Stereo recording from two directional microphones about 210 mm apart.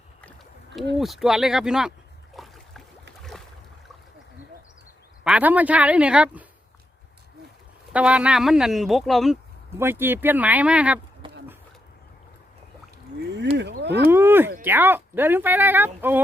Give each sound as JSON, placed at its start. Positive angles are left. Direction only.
{"t": 0.9, "sound": "speech", "side_deg": 0}
{"t": 2.3, "sound": "a sound", "side_deg": 0}
{"t": 5.2, "sound": "speech", "side_deg": -5}
{"t": 7.9, "sound": "speech", "side_deg": -5}
{"t": 9.7, "sound": "speech", "side_deg": -10}
{"t": 11.2, "sound": "bee", "side_deg": -25}
{"t": 13.6, "sound": "speech", "side_deg": -55}
{"t": 14.1, "sound": "speech", "side_deg": -10}